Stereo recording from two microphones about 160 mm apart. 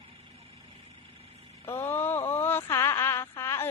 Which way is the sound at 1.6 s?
15° left (ahead or behind).